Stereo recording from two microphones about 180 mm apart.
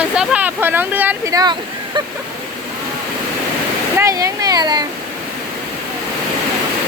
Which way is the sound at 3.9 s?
15° right (ahead or behind).